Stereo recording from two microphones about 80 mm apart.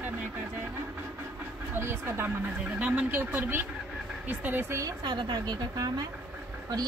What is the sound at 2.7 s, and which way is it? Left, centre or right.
Speech, centre.